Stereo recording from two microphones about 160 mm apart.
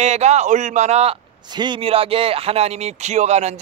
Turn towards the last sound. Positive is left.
turn(degrees=-45)  # may be behind; listen again after turning